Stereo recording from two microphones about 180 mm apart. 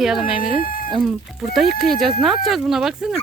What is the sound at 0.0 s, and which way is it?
Speech, 5° right (ahead or behind).